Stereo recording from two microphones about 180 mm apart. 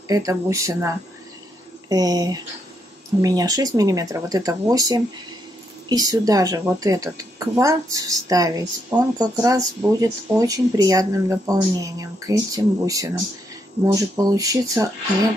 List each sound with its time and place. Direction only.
0.1 s speech: 20° right (ahead or behind)